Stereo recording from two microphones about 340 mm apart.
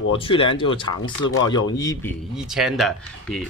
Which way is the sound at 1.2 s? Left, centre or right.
Left.